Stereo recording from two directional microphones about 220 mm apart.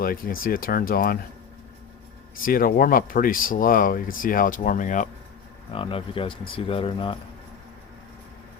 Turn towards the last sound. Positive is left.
turn(degrees=25)  # may be behind; listen again after turning